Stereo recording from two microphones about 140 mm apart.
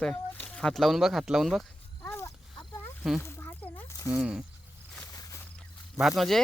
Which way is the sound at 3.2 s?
15° left (ahead or behind).